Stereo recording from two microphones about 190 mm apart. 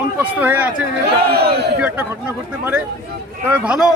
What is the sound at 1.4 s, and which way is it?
Speech, 60° right (ahead or behind).